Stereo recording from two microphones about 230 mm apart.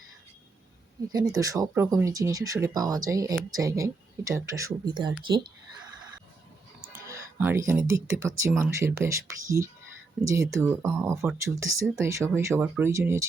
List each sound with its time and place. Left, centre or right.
1.1 s speech: centre
7.1 s speech: centre